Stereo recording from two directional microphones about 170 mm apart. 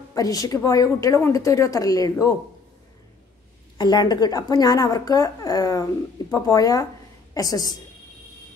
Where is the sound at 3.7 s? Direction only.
25° left (ahead or behind).